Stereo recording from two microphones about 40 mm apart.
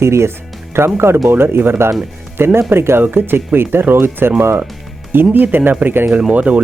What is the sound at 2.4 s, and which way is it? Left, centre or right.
Speech, right.